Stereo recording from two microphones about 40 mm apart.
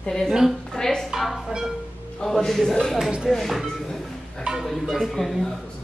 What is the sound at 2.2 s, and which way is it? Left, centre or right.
Speech, centre.